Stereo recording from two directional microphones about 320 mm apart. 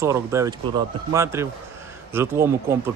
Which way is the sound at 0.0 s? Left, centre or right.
Centre.